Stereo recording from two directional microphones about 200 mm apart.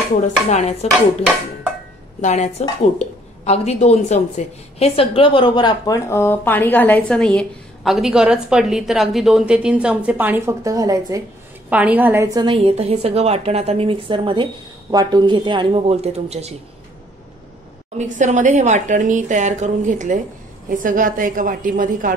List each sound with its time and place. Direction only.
0.2 s dishes: 35° left (ahead or behind)
2.2 s dishes: 35° left (ahead or behind)
3.0 s a woman's voice: 35° left (ahead or behind); by 12.4 s 10° right (ahead or behind)
12.4 s a woman's voice: 25° right (ahead or behind)
17.9 s a woman's voice: 40° right (ahead or behind)